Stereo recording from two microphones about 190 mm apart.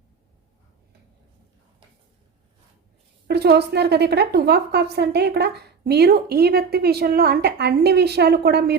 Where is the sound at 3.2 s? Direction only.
55° right (ahead or behind).